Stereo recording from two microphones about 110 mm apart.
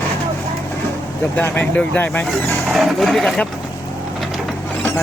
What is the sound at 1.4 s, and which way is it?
Speech, 15° left (ahead or behind).